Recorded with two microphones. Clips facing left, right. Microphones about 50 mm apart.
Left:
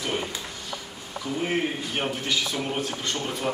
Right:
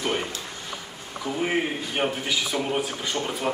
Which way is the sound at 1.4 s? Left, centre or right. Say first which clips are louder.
Right 1 dB; centre.